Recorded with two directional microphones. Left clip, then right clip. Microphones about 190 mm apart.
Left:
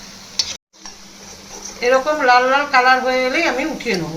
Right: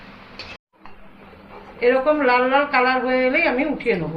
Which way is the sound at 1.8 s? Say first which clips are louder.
Left 2 dB; 10° left (ahead or behind).